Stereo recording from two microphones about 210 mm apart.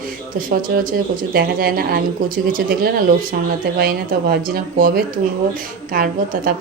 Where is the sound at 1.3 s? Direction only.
45° right (ahead or behind).